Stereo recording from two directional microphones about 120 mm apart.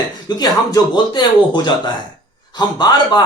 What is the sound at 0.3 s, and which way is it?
Speech, 30° left (ahead or behind).